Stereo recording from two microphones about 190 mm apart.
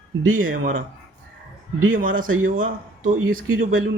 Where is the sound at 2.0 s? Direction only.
45° right (ahead or behind).